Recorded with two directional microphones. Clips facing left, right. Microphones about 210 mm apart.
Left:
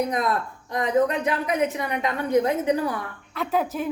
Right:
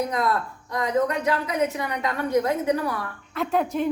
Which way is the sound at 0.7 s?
20° left (ahead or behind).